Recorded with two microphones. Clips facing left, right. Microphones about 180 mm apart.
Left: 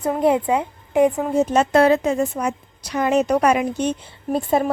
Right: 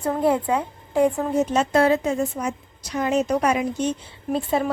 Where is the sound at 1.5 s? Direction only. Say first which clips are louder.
Left 4 dB; 70° left (ahead or behind).